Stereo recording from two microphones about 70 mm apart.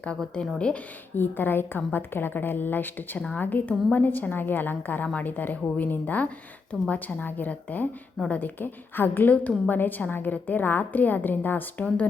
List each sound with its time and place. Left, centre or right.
0.3 s speech: centre
1.1 s a woman's voice: left